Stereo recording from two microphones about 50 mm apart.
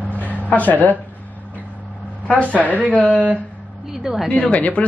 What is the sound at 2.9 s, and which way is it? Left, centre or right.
Speech, left.